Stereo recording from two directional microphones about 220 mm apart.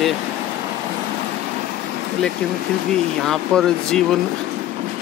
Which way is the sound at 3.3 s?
Centre (ahead or behind).